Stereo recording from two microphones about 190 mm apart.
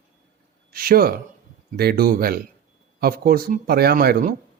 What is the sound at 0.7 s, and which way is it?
Speech, 50° right (ahead or behind).